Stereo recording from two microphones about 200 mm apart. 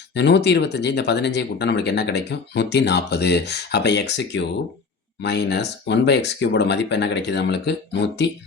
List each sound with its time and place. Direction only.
0.1 s speech: 60° left (ahead or behind)